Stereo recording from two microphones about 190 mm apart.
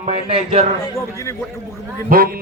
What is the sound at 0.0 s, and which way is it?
Speech, 30° right (ahead or behind).